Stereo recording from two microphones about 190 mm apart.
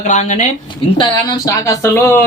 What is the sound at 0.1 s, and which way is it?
Speech, 40° left (ahead or behind).